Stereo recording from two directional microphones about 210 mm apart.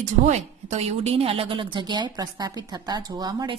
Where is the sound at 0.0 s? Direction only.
30° right (ahead or behind).